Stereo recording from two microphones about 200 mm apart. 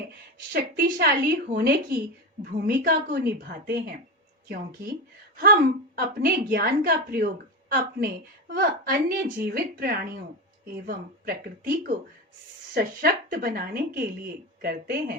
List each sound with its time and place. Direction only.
0.5 s a woman's voice: 50° right (ahead or behind)
6.0 s a woman's voice: 50° right (ahead or behind)